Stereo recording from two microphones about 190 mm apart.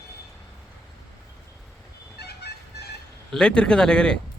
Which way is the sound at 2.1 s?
60° left (ahead or behind).